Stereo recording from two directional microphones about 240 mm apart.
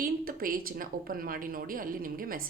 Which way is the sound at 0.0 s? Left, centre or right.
Right.